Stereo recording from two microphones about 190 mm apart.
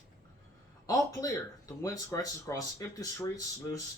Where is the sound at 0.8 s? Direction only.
20° left (ahead or behind).